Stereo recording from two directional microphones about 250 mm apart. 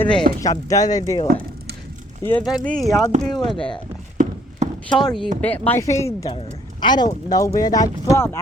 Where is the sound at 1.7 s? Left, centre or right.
Right.